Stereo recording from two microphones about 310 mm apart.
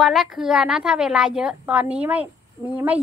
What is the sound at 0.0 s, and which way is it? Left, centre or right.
Speech, centre.